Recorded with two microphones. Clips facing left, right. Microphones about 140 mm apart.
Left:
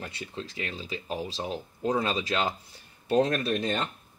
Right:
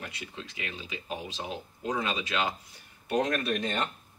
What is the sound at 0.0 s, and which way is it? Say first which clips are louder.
Speech: left 4 dB; 35° left (ahead or behind).